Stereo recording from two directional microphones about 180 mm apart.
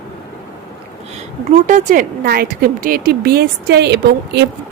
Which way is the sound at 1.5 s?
40° right (ahead or behind).